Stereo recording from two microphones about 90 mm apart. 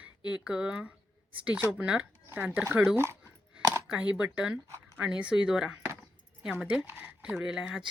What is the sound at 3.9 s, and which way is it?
Speech, 10° right (ahead or behind).